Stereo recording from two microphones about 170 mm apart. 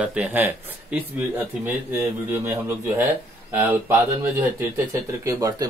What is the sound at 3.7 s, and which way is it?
Speech, 10° right (ahead or behind).